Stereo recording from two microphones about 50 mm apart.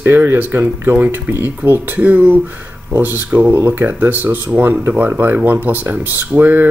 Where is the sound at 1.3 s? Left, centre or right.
Right.